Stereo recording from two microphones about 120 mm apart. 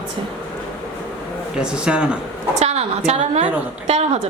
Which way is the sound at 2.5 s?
65° right (ahead or behind).